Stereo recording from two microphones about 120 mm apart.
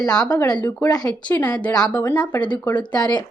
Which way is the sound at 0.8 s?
35° left (ahead or behind).